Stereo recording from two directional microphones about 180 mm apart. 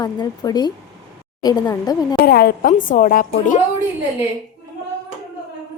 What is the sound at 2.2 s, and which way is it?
A woman's voice, 55° left (ahead or behind).